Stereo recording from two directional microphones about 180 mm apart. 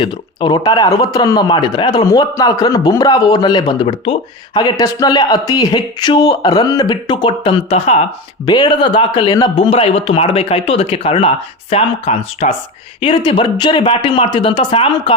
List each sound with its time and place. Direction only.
0.0 s speech: 25° left (ahead or behind)
8.4 s speech: 25° left (ahead or behind)